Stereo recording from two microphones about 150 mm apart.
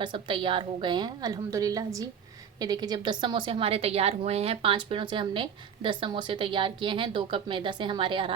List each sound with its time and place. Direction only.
0.0 s a woman's voice: 35° right (ahead or behind)